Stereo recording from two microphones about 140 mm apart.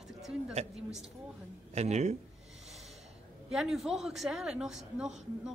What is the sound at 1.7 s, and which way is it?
Speech, 55° right (ahead or behind).